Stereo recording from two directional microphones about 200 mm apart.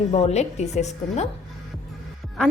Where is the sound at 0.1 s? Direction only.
35° left (ahead or behind).